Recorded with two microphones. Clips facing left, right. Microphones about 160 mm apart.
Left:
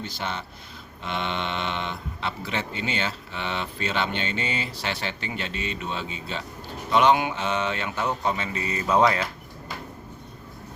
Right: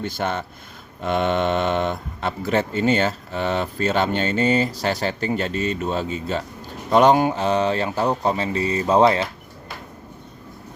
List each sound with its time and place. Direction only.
0.0 s speech: 50° right (ahead or behind); by 9.2 s 30° right (ahead or behind)